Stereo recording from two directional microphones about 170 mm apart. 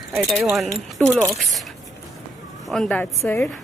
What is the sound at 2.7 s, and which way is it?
Speech, 5° left (ahead or behind).